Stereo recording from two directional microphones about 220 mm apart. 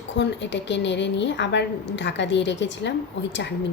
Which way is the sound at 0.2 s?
55° left (ahead or behind).